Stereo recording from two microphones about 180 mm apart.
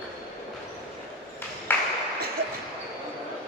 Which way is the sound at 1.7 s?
10° left (ahead or behind).